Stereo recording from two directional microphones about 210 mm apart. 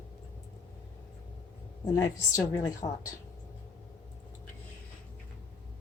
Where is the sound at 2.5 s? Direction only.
15° left (ahead or behind).